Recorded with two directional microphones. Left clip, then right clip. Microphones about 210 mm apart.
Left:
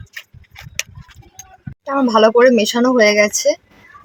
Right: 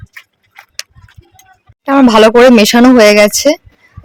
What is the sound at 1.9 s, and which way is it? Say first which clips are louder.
Speech: right 7 dB; 45° right (ahead or behind).